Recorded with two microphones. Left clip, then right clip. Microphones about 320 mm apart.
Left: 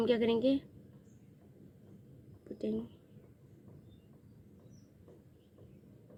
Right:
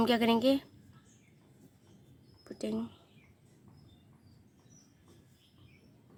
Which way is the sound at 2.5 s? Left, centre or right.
Centre.